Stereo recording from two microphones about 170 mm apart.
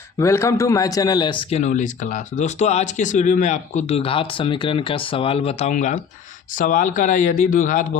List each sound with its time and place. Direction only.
0.2 s speech: 15° left (ahead or behind); by 7.9 s 50° left (ahead or behind)